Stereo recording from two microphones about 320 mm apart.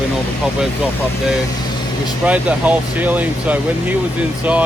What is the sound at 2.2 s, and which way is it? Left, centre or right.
Speech, centre.